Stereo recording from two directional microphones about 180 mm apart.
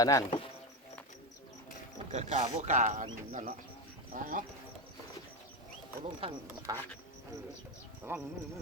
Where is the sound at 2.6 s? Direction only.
45° right (ahead or behind).